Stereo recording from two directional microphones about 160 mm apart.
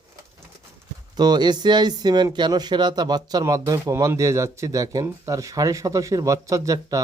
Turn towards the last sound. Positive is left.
turn(degrees=-20)  # may be behind; listen again after turning